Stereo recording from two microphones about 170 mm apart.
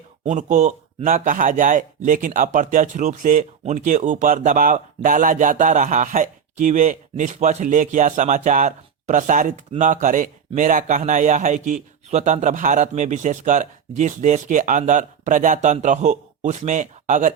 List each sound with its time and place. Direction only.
0.3 s speech: 45° right (ahead or behind)